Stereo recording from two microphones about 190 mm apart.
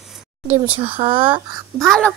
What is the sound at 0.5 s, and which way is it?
Speech, 25° right (ahead or behind).